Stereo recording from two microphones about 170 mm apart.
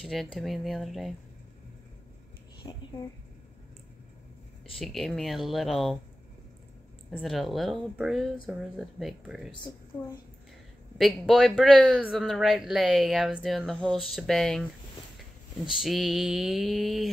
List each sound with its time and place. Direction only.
0.0 s speech: centre (ahead or behind)
2.6 s a sound: 20° left (ahead or behind)
4.7 s speech: centre (ahead or behind)
7.1 s speech: centre (ahead or behind)
9.9 s a woman's voice: 15° left (ahead or behind)
11.0 s speech: centre (ahead or behind)
15.7 s speech: centre (ahead or behind)